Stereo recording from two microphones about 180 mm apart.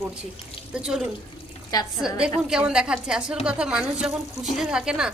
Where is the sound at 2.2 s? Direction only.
5° right (ahead or behind).